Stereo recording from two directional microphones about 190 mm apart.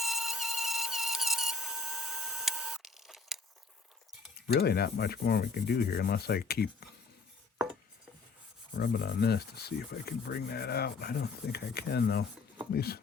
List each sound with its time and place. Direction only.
0.0 s a sound: centre (ahead or behind)
4.4 s rub: 55° left (ahead or behind)
8.8 s rub: 55° left (ahead or behind)